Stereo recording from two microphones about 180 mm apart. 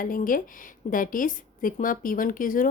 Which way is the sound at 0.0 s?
50° left (ahead or behind).